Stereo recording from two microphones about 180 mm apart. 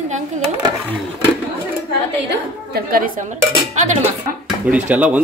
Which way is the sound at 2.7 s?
55° right (ahead or behind).